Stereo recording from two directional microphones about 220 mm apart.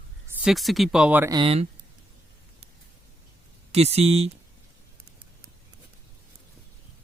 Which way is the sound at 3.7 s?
30° right (ahead or behind).